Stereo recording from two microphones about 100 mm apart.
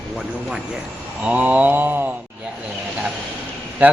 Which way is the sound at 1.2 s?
15° right (ahead or behind).